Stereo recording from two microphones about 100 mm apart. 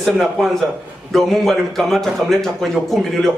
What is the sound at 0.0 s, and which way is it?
Speech, 5° left (ahead or behind).